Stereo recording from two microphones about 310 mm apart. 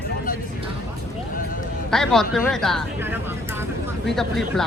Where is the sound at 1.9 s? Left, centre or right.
Centre.